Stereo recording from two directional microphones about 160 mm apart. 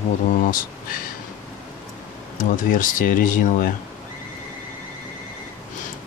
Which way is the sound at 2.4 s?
55° left (ahead or behind).